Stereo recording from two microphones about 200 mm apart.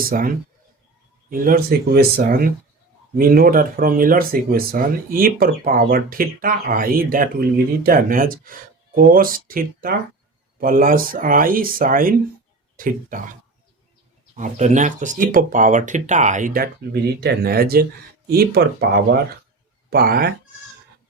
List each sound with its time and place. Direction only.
0.0 s speech: 45° right (ahead or behind)
14.3 s speech: 35° right (ahead or behind)
19.9 s speech: 50° right (ahead or behind)